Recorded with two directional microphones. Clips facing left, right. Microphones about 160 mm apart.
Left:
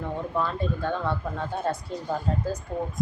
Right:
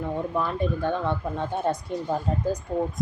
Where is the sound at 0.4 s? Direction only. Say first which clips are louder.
Right 2 dB; 15° right (ahead or behind).